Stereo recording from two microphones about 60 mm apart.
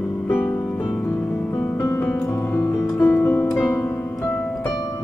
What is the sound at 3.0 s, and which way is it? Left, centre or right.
Music, left.